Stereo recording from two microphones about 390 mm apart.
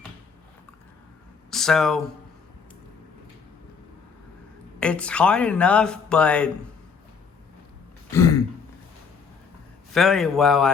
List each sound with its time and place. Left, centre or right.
1.5 s speech: centre
4.8 s speech: centre
8.1 s throat clearing: centre
9.9 s speech: centre